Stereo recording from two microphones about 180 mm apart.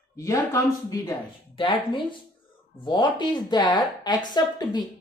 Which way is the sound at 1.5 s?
30° left (ahead or behind).